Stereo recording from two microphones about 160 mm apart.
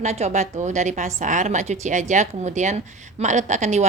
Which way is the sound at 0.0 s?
45° right (ahead or behind).